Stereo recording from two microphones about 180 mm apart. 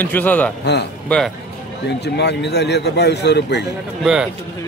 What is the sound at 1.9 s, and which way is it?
Speech, 70° left (ahead or behind).